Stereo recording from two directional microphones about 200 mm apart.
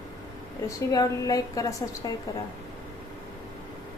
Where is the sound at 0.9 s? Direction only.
20° left (ahead or behind).